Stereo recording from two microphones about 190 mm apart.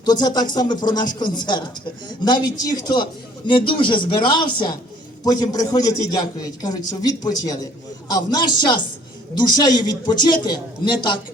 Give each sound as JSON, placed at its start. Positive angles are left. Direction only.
{"t": 0.0, "sound": "a man's voice", "side_deg": 20}